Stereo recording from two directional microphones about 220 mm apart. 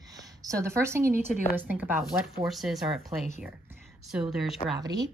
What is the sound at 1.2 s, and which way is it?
Speech, 35° left (ahead or behind).